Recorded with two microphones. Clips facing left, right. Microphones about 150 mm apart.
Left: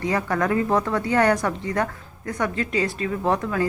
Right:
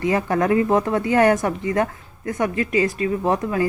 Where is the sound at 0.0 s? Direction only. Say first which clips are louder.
Right 3 dB; 20° right (ahead or behind).